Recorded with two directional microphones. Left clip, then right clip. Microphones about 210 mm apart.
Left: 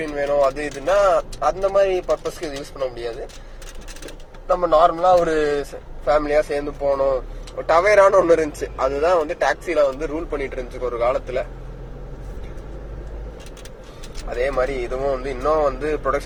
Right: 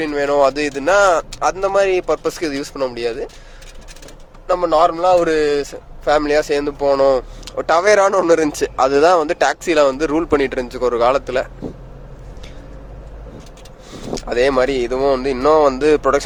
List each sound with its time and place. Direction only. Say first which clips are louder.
0.0 s speech: right 4 dB; 40° right (ahead or behind)
4.4 s speech: right 2 dB; 40° right (ahead or behind)
6.8 s a man's voice: right 6 dB; 50° right (ahead or behind)
7.7 s a man's voice: right 1 dB; 40° right (ahead or behind)
14.3 s speech: right 6 dB; 40° right (ahead or behind)